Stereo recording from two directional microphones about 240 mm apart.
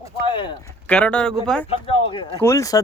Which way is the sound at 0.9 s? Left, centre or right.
Centre.